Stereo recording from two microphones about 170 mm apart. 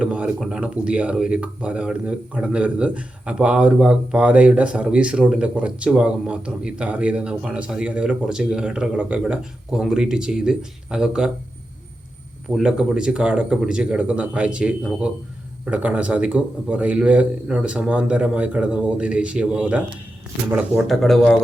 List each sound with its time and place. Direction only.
0.0 s speech: 10° right (ahead or behind)
12.5 s speech: 5° right (ahead or behind)
20.8 s speech: centre (ahead or behind)